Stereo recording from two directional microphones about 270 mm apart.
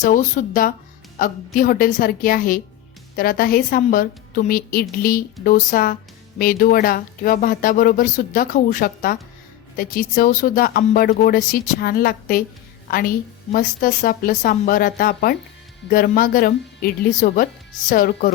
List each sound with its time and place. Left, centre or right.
0.0 s a woman's voice: left